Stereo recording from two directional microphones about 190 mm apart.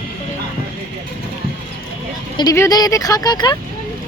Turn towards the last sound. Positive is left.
turn(degrees=20)  # may be behind; listen again after turning